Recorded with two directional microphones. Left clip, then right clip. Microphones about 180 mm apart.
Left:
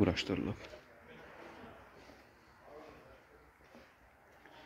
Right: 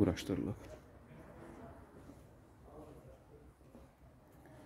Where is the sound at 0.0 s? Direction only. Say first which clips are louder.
Left 2 dB; 15° right (ahead or behind).